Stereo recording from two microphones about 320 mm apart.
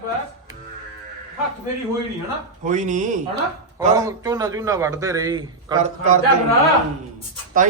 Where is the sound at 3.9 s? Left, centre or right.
Centre.